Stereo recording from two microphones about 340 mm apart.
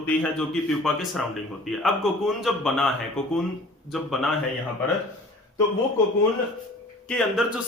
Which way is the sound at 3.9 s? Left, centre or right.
Centre.